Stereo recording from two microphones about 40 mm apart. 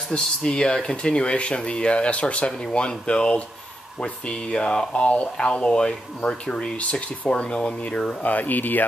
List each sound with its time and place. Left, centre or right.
0.1 s speech: left
7.7 s speech: left